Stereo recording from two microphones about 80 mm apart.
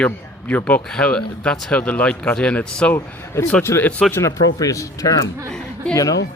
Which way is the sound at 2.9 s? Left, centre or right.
Left.